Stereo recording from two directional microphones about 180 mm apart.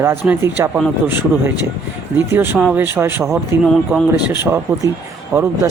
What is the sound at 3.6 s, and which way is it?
Speech, centre (ahead or behind).